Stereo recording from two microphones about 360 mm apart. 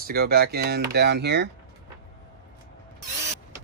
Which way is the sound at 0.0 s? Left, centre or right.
Right.